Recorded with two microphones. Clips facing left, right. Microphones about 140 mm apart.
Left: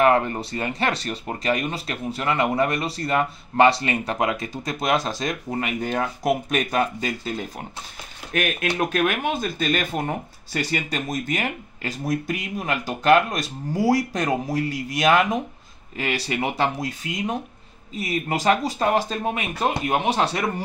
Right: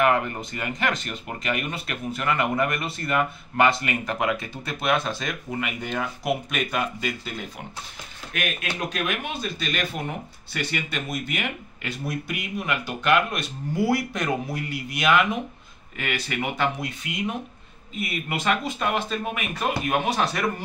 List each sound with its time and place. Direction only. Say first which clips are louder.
0.0 s speech: left 3 dB; 35° left (ahead or behind)